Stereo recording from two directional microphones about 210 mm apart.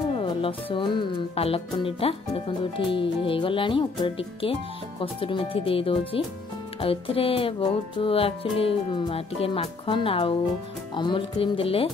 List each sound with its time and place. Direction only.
0.1 s speech: 25° left (ahead or behind)